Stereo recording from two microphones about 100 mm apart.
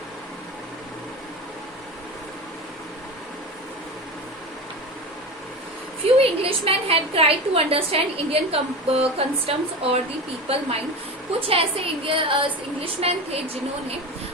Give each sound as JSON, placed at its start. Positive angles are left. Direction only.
{"t": 6.1, "sound": "a woman's voice", "side_deg": -75}